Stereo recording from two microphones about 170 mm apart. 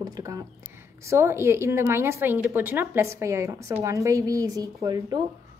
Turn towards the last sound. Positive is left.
turn(degrees=-25)  # may be behind; listen again after turning